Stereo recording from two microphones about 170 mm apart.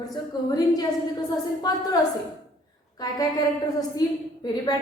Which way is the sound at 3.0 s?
25° left (ahead or behind).